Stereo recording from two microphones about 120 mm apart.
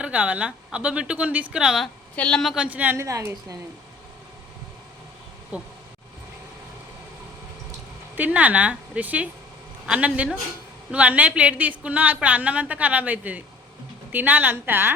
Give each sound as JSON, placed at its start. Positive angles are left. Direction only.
{"t": 0.0, "sound": "a woman's voice", "side_deg": -10}
{"t": 2.1, "sound": "a woman's voice", "side_deg": 10}
{"t": 2.6, "sound": "a woman's voice", "side_deg": -15}
{"t": 5.5, "sound": "a woman's voice", "side_deg": -10}
{"t": 8.1, "sound": "a woman's voice", "side_deg": -15}